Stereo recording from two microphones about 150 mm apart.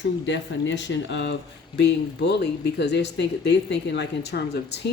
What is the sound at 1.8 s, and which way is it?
Speech, 90° left.